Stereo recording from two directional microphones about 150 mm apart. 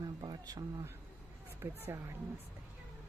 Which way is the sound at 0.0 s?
25° right (ahead or behind).